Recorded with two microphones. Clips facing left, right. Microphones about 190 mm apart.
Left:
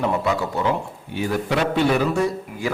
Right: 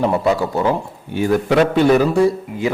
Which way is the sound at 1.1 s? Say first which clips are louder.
Right 7 dB; 50° right (ahead or behind).